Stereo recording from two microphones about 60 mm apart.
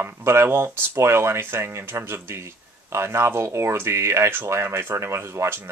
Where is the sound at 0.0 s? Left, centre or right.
Right.